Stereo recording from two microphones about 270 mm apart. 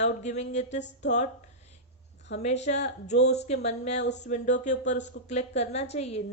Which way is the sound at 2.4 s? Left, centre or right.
Left.